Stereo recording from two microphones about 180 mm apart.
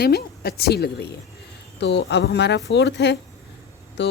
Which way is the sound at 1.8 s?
75° left (ahead or behind).